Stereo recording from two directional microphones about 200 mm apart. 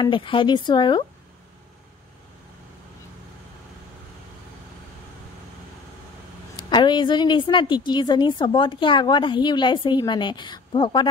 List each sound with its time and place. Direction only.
0.0 s a woman's voice: 25° left (ahead or behind)
6.7 s a woman's voice: 25° left (ahead or behind)